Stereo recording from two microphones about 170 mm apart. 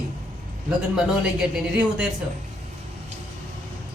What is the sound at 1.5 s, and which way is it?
Speech, 5° right (ahead or behind).